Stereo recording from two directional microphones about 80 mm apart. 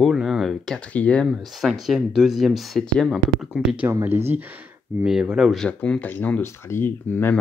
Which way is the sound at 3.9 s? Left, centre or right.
Right.